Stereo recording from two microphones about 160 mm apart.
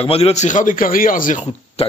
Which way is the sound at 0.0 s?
40° left (ahead or behind).